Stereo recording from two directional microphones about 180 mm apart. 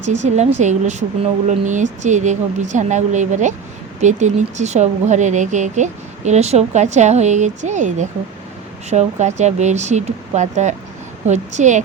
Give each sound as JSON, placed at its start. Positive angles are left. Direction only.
{"t": 0.0, "sound": "a woman's voice", "side_deg": -40}